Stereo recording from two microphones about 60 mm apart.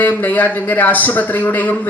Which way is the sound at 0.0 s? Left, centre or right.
Left.